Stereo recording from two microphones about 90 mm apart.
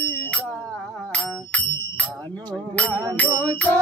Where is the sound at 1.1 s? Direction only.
15° left (ahead or behind).